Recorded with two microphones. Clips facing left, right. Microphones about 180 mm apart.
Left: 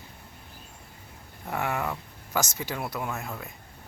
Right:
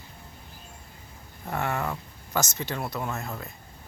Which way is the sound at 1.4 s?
10° left (ahead or behind).